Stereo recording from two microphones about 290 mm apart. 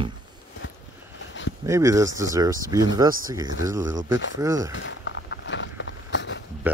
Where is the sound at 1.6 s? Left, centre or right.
Centre.